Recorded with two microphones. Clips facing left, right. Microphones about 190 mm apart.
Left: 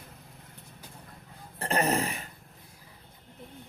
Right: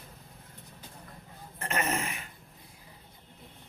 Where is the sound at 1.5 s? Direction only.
35° left (ahead or behind).